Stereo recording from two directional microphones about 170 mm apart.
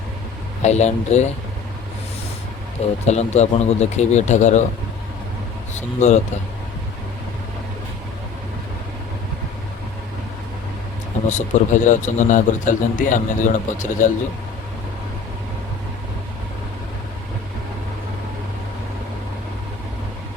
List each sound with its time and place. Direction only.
0.6 s a man's voice: 40° left (ahead or behind)
3.1 s a man's voice: 40° left (ahead or behind)
6.0 s speech: 45° left (ahead or behind)
11.3 s speech: 45° left (ahead or behind)